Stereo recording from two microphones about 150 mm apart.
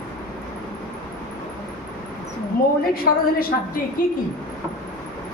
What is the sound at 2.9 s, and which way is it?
A woman's voice, 75° left (ahead or behind).